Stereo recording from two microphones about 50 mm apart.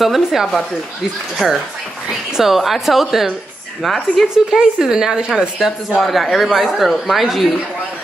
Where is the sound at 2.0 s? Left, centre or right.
Centre.